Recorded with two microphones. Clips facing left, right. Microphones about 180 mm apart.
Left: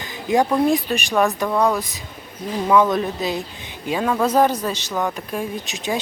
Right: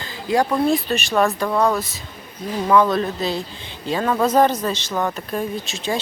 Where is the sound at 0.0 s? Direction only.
20° left (ahead or behind).